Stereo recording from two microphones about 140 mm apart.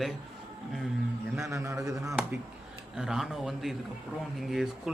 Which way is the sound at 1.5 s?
20° right (ahead or behind).